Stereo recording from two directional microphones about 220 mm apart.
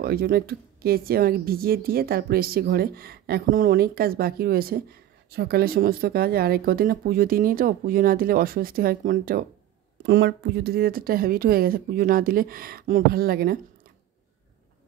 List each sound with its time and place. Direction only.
0.0 s a woman's voice: 45° right (ahead or behind)